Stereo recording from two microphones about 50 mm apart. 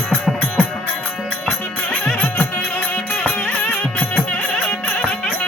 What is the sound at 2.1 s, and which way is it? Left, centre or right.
Music, left.